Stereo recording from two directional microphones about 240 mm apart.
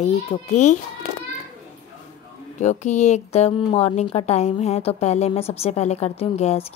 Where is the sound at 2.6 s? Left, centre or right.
Left.